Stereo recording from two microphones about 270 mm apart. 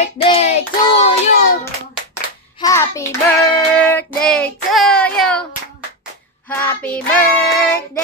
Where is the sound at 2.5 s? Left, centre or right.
Centre.